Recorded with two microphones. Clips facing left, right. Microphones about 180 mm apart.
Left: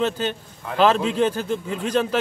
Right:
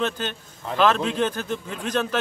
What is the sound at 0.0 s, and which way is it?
Speech, 10° left (ahead or behind).